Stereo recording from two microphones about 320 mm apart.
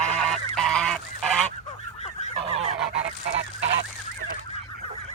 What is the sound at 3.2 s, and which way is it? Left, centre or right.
Goose, right.